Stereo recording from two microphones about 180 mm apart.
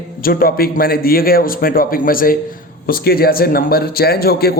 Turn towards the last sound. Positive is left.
turn(degrees=60)  # may be behind; listen again after turning